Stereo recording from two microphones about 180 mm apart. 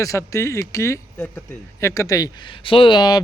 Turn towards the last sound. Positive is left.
turn(degrees=25)  # may be behind; listen again after turning